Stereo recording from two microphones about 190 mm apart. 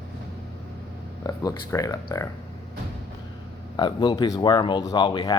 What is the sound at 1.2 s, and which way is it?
Speech, 20° left (ahead or behind).